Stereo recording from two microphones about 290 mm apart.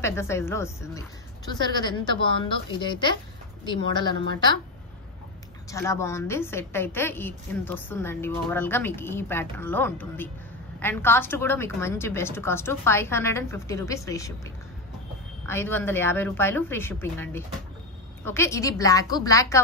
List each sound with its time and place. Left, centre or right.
0.0 s a woman's voice: centre
5.7 s a woman's voice: centre